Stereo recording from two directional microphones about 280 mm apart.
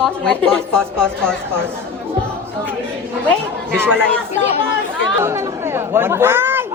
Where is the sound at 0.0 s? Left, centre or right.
Centre.